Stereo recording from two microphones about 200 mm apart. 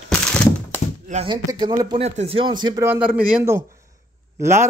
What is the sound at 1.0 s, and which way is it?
Speech, 30° right (ahead or behind).